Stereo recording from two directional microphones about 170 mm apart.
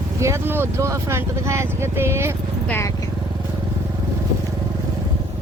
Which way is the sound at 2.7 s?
15° left (ahead or behind).